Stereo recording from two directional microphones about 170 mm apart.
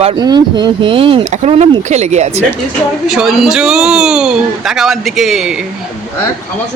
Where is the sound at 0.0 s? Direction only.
30° right (ahead or behind).